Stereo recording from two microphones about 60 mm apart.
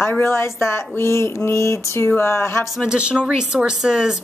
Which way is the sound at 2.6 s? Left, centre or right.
Centre.